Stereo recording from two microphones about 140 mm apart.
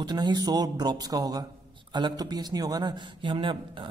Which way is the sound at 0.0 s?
30° right (ahead or behind).